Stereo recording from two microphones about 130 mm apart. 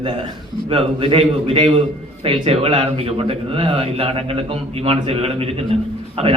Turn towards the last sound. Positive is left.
turn(degrees=-50)  # may be behind; listen again after turning